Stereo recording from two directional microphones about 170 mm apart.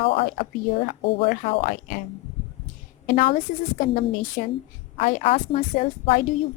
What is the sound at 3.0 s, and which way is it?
A woman's voice, 50° left (ahead or behind).